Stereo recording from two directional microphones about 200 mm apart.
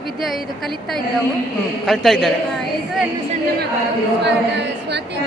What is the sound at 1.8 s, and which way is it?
Speech, centre (ahead or behind).